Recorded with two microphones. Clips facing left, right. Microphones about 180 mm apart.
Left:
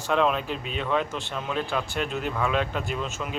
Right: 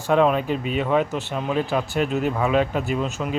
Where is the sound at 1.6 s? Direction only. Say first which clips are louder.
Right 5 dB; 40° right (ahead or behind).